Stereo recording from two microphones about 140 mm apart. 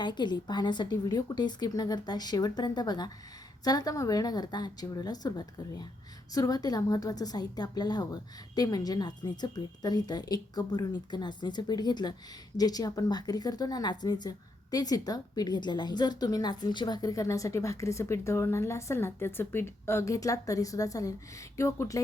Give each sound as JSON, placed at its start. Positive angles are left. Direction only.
{"t": 0.0, "sound": "a woman's voice", "side_deg": 30}